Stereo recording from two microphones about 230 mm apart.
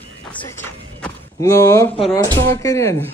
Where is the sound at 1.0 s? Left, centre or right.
Centre.